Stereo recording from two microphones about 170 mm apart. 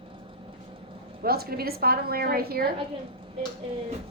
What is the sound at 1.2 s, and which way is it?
A woman's voice, 65° right (ahead or behind).